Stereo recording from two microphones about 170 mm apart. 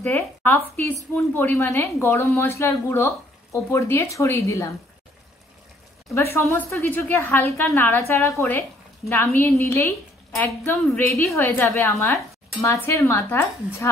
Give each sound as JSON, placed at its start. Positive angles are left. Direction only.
{"t": 0.0, "sound": "a woman's voice", "side_deg": 10}
{"t": 6.3, "sound": "a woman's voice", "side_deg": 15}